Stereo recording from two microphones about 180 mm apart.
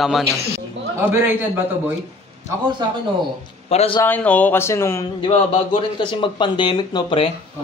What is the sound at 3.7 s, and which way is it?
Speech, 35° left (ahead or behind).